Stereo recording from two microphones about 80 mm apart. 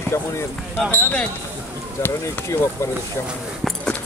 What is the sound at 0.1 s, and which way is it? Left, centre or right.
Speech, left.